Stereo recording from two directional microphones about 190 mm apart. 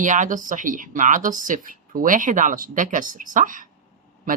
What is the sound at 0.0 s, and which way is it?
Speech, 40° right (ahead or behind).